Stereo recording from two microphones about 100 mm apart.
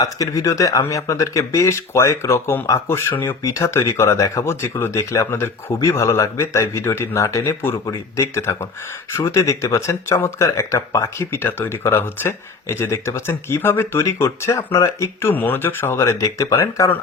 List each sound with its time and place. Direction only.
0.0 s speech: 35° left (ahead or behind)